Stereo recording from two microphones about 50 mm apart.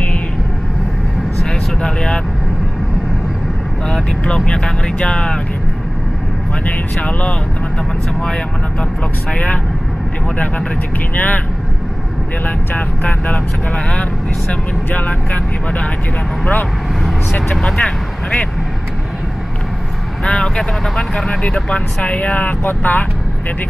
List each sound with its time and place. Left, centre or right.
1.8 s vehicle: centre
3.8 s vehicle: centre
7.0 s vehicle: left
9.3 s speech: left
11.1 s speech: left
12.4 s speech: left
14.5 s speech: left
17.7 s speech: left
20.2 s speech: centre; by 23.0 s left